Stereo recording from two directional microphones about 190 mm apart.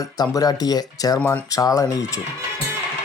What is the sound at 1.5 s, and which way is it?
Speech, 20° left (ahead or behind).